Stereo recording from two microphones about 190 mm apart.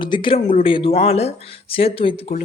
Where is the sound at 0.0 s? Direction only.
25° left (ahead or behind).